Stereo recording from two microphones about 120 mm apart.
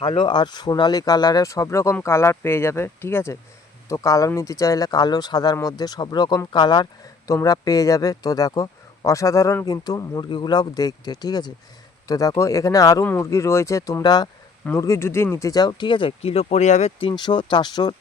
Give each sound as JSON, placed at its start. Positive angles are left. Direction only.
{"t": 0.0, "sound": "speech", "side_deg": 40}
{"t": 14.8, "sound": "speech", "side_deg": 25}
{"t": 17.0, "sound": "speech", "side_deg": 45}